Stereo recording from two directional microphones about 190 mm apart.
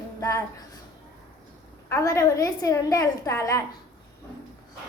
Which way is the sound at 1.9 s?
15° left (ahead or behind).